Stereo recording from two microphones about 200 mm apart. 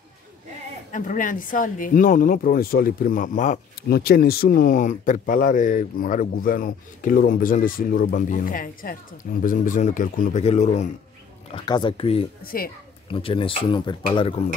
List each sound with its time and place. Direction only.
0.9 s speech: 40° left (ahead or behind)
11.5 s speech: 25° left (ahead or behind)
12.4 s speech: 45° left (ahead or behind)
13.1 s speech: 25° left (ahead or behind)